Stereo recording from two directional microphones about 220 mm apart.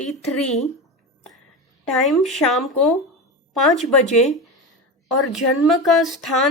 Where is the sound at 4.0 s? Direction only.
30° left (ahead or behind).